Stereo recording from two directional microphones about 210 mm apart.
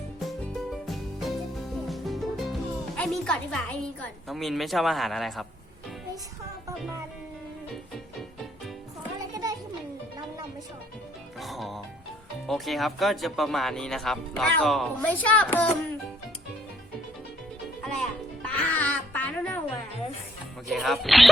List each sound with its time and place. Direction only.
0.2 s music: centre (ahead or behind)
9.3 s a sound: 15° right (ahead or behind)
11.3 s music: centre (ahead or behind)
12.5 s speech: centre (ahead or behind)
17.8 s music: 5° left (ahead or behind)
20.7 s speech: centre (ahead or behind)